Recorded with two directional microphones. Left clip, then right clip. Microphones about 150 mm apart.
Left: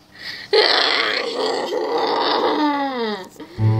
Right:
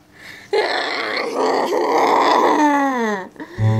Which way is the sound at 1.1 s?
25° right (ahead or behind).